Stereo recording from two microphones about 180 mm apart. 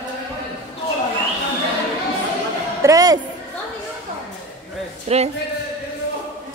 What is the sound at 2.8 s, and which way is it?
Speech, 20° right (ahead or behind).